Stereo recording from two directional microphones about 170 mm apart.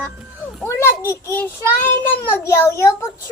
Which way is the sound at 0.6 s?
15° left (ahead or behind).